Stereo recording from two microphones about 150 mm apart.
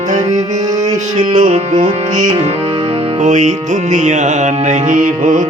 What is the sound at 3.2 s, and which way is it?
Music, 55° right (ahead or behind).